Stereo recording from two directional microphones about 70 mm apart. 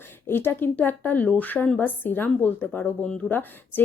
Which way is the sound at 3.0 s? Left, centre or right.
Centre.